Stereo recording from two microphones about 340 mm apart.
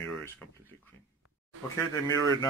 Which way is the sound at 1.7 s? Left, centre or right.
Centre.